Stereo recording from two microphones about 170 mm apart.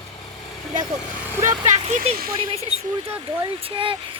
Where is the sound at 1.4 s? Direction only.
45° right (ahead or behind).